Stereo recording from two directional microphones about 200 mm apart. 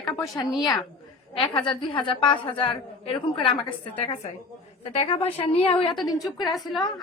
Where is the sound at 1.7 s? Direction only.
25° left (ahead or behind).